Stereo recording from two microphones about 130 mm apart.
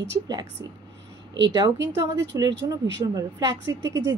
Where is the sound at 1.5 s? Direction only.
30° right (ahead or behind).